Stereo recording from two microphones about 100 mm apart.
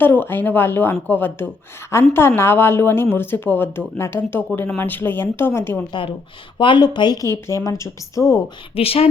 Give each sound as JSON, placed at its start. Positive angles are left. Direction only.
{"t": 0.0, "sound": "speech", "side_deg": 20}
{"t": 5.9, "sound": "speech", "side_deg": 55}
{"t": 7.4, "sound": "speech", "side_deg": 30}
{"t": 8.7, "sound": "speech", "side_deg": 75}